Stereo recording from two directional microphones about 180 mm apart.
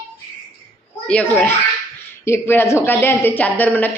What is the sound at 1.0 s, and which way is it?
Speech, 5° left (ahead or behind).